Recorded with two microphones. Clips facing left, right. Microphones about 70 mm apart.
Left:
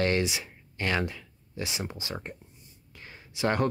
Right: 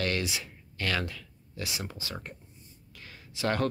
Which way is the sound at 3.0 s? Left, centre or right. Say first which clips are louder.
Left 4 dB; left.